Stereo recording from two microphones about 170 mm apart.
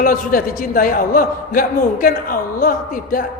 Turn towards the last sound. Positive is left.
turn(degrees=50)  # may be behind; listen again after turning